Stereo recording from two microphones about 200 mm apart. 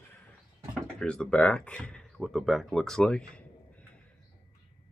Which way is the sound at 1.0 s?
5° left (ahead or behind).